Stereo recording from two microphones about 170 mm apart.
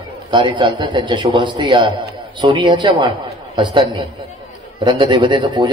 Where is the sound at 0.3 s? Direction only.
30° right (ahead or behind).